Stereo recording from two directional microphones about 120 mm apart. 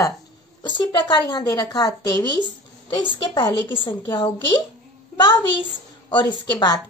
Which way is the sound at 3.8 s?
45° left (ahead or behind).